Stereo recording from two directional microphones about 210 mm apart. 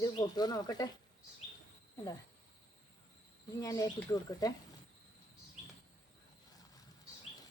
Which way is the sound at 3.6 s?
15° left (ahead or behind).